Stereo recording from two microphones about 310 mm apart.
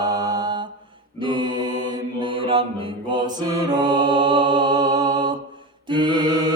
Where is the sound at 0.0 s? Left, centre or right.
Centre.